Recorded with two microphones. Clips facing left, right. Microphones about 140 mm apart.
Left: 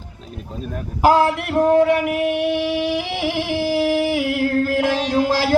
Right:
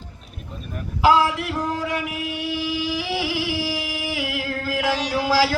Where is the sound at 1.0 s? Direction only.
50° left (ahead or behind).